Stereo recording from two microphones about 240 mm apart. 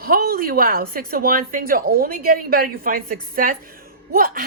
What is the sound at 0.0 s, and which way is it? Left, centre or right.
Speech, right.